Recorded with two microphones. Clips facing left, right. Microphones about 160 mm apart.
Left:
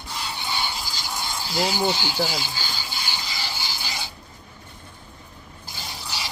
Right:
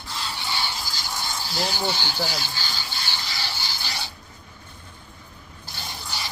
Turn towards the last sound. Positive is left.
turn(degrees=5)  # may be behind; listen again after turning